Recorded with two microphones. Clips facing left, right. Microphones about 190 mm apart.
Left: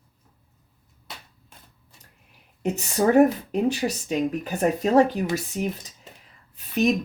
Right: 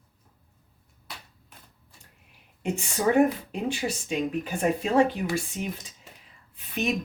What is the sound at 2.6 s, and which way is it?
Speech, 40° left (ahead or behind).